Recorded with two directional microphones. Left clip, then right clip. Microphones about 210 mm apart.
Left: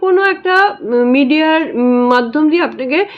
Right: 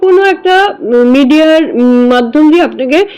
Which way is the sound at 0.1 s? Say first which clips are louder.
Right 3 dB; 15° right (ahead or behind).